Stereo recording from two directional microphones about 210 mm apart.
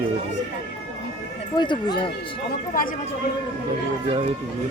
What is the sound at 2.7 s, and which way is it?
Speech, 40° left (ahead or behind).